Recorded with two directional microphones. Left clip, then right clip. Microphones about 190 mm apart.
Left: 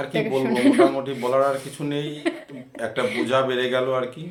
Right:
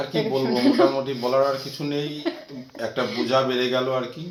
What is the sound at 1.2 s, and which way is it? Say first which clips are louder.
Speech: left 1 dB; 10° left (ahead or behind).